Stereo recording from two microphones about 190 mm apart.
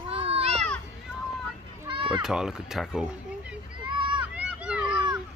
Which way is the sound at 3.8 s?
25° right (ahead or behind).